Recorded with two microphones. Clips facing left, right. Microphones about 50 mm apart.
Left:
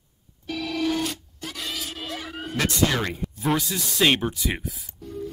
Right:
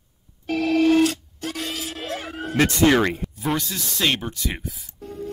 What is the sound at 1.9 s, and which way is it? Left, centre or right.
Music, right.